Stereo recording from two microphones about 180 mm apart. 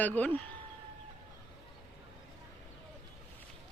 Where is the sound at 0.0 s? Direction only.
10° left (ahead or behind).